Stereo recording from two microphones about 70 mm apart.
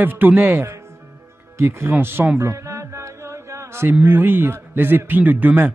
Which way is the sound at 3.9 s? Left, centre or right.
Right.